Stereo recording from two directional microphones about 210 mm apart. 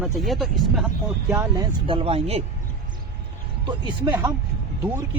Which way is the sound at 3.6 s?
20° right (ahead or behind).